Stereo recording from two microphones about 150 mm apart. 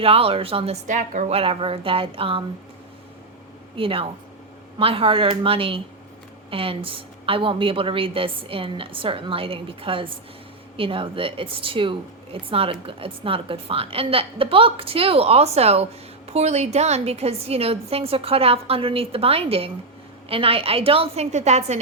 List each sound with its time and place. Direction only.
0.0 s a woman's voice: 40° right (ahead or behind)
0.9 s a woman's voice: 55° right (ahead or behind); by 2.4 s 35° right (ahead or behind)
3.8 s a woman's voice: 35° right (ahead or behind)